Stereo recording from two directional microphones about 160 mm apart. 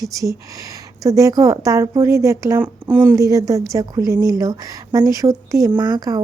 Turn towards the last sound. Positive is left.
turn(degrees=-20)  # may be behind; listen again after turning